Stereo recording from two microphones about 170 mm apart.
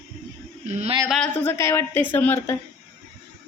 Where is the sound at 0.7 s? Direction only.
40° right (ahead or behind).